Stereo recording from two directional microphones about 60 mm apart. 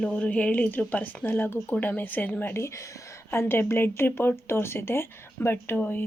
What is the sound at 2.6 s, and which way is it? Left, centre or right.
Speech, left.